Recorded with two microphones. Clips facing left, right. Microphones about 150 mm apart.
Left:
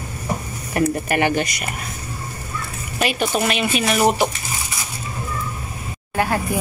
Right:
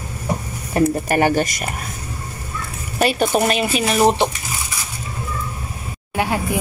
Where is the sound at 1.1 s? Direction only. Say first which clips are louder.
Right 3 dB; 40° right (ahead or behind).